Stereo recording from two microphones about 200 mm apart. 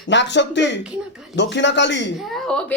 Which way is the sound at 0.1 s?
60° left (ahead or behind).